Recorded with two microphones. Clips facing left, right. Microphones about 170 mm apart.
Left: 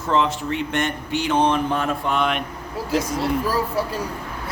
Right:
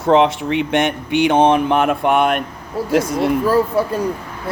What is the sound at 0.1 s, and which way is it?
Speech, 70° right (ahead or behind).